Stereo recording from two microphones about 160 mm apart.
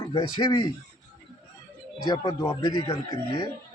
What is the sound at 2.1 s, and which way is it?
Speech, 25° left (ahead or behind).